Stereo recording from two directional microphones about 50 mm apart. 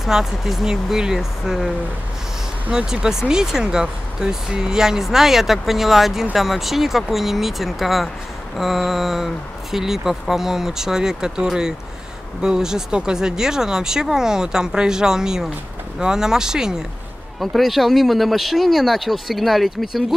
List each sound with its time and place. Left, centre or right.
0.0 s speech: centre
2.7 s speech: centre
17.4 s speech: centre